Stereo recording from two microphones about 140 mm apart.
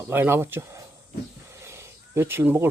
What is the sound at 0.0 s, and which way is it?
Speech, 15° right (ahead or behind).